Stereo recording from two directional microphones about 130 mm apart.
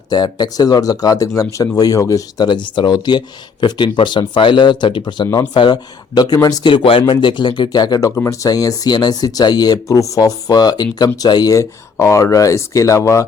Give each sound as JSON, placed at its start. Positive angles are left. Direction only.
{"t": 0.1, "sound": "speech", "side_deg": 30}